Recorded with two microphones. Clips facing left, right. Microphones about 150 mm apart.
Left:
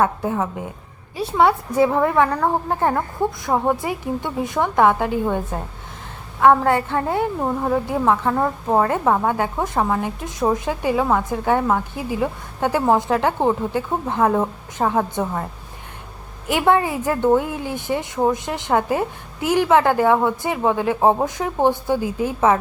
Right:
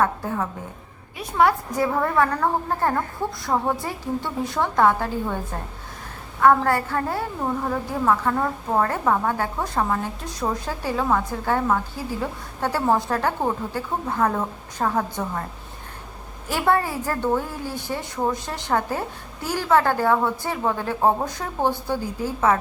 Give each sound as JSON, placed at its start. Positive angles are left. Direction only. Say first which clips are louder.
{"t": 0.0, "sound": "a woman's voice", "louder": "left 3 dB", "side_deg": 20}
{"t": 6.4, "sound": "a woman's voice", "louder": "left 3 dB", "side_deg": 20}
{"t": 16.5, "sound": "a woman's voice", "louder": "left 4 dB", "side_deg": 15}